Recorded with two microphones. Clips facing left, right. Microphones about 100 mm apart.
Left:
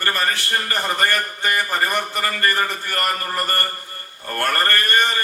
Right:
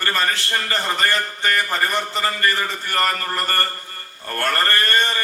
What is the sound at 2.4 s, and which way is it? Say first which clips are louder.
Speech: left 4 dB; 20° left (ahead or behind).